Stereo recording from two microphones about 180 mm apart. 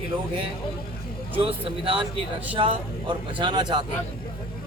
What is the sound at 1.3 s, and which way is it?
Speech, 30° right (ahead or behind).